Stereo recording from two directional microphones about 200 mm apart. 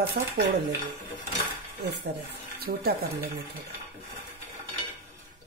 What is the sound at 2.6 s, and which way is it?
Speech, 50° right (ahead or behind).